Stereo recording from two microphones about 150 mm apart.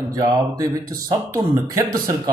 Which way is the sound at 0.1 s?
20° right (ahead or behind).